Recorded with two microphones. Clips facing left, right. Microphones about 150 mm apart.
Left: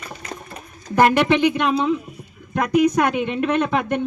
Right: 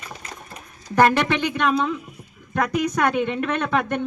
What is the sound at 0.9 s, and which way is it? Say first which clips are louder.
Speech: left 2 dB; 10° left (ahead or behind).